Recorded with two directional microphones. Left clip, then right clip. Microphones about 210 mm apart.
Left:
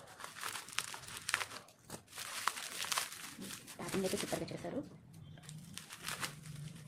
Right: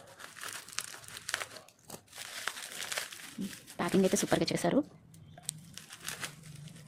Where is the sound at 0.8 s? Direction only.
5° left (ahead or behind).